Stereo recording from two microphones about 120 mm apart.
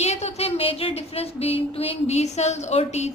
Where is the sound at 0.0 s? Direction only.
65° left (ahead or behind).